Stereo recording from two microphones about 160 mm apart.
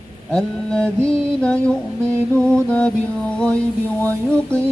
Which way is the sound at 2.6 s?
5° left (ahead or behind).